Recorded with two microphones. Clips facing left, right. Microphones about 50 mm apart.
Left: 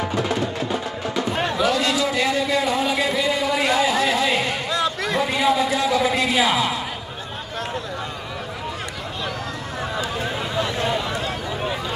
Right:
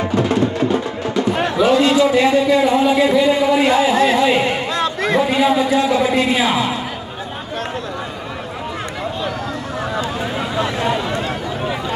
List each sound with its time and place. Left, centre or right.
1.6 s speech: right
4.7 s a sound: right
5.3 s a man's voice: right